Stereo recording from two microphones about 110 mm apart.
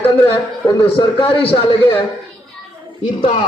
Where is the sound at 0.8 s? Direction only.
50° left (ahead or behind).